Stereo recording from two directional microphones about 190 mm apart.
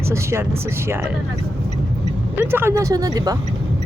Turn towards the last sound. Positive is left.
turn(degrees=-20)  # may be behind; listen again after turning